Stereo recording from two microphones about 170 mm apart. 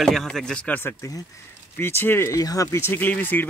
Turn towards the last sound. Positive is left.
turn(degrees=10)  # may be behind; listen again after turning